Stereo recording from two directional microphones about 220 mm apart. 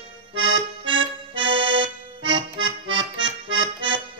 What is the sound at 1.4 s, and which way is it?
Accordion, 20° right (ahead or behind).